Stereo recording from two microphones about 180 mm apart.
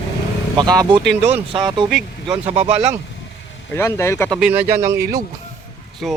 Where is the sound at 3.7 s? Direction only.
15° left (ahead or behind).